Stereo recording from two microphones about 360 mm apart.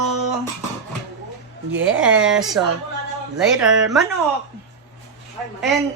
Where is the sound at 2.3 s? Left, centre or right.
Centre.